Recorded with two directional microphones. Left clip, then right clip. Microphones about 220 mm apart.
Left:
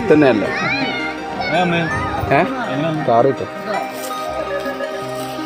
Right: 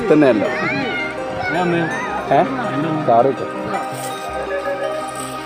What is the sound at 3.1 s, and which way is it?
Speech, 20° left (ahead or behind).